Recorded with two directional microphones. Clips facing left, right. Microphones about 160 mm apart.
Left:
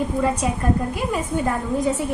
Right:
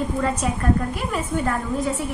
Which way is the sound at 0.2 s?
10° left (ahead or behind).